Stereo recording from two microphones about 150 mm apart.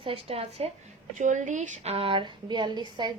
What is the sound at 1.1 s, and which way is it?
A woman's voice, 55° right (ahead or behind).